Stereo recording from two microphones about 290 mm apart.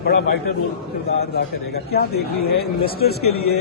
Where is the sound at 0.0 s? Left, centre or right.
Left.